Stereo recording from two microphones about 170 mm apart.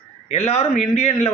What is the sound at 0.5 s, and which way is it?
Speech, 40° left (ahead or behind).